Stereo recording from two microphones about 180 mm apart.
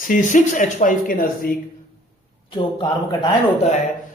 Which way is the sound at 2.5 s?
25° left (ahead or behind).